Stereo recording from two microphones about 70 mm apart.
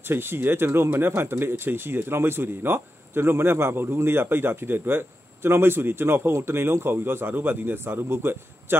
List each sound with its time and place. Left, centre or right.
0.0 s speech: right